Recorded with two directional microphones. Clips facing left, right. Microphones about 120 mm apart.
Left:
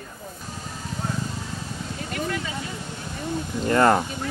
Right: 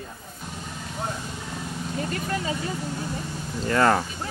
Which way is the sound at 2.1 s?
35° right (ahead or behind).